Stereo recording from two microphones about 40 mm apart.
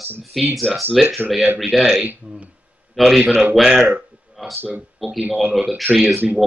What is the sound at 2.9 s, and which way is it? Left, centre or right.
A man's voice, centre.